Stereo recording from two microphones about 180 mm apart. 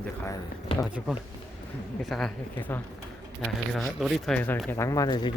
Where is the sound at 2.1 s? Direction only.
5° left (ahead or behind).